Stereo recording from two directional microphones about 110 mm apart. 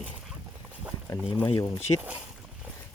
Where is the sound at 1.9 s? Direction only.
40° left (ahead or behind).